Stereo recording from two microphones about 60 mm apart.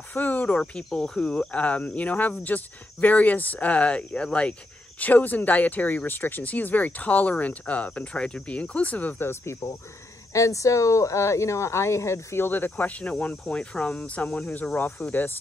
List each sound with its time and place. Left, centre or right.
0.1 s a sound: left
0.6 s speech: centre; by 9.3 s left
9.3 s speech: left
10.3 s speech: left
12.4 s speech: left